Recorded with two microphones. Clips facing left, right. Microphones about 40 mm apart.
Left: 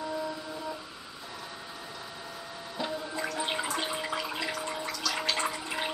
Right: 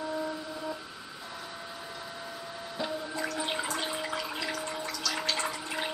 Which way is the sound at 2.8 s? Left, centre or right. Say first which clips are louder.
Even; centre.